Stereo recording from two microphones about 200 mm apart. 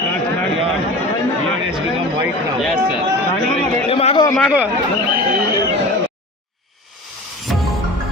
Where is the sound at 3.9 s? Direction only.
30° left (ahead or behind).